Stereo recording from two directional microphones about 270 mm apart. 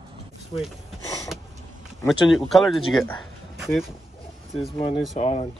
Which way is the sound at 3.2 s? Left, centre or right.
Centre.